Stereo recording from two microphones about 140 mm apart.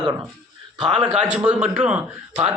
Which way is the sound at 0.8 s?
5° right (ahead or behind).